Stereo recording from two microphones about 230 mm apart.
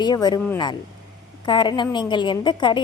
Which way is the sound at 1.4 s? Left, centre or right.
Centre.